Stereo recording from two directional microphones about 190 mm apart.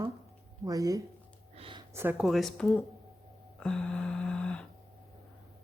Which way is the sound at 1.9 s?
10° right (ahead or behind).